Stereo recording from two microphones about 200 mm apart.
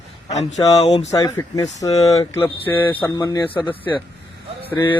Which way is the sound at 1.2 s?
15° left (ahead or behind).